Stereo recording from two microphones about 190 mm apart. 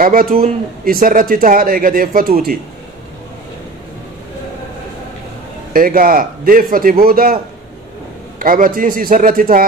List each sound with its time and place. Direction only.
0.0 s speech: 50° right (ahead or behind)
5.7 s speech: 50° right (ahead or behind)
8.4 s speech: 45° right (ahead or behind)